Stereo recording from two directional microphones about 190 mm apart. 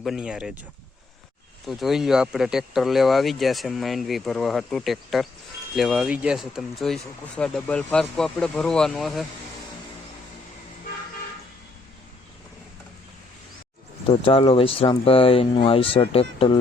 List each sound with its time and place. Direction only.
0.0 s speech: centre (ahead or behind)
1.6 s speech: centre (ahead or behind)
14.1 s speech: 30° left (ahead or behind)